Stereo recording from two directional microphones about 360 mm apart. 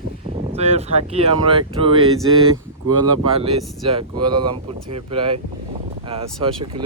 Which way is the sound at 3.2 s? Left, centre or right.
Centre.